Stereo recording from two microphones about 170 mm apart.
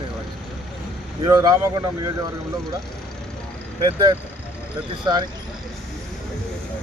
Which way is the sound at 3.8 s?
25° right (ahead or behind).